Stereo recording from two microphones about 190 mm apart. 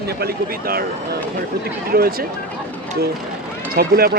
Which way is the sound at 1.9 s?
50° right (ahead or behind).